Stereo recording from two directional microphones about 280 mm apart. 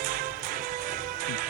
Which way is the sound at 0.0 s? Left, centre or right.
Right.